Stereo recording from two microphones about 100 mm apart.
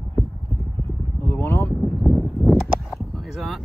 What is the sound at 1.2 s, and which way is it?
Vehicle, 20° left (ahead or behind).